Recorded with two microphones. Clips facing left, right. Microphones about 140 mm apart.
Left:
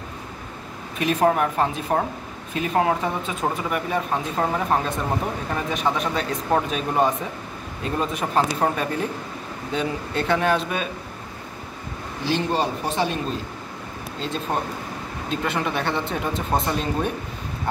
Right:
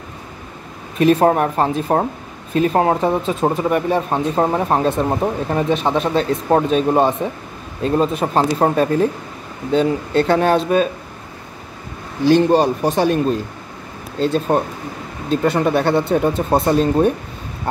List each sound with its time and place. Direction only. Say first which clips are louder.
0.9 s speech: right 7 dB; 35° right (ahead or behind)
12.3 s speech: right 10 dB; 50° right (ahead or behind)
15.2 s speech: right 9 dB; 40° right (ahead or behind)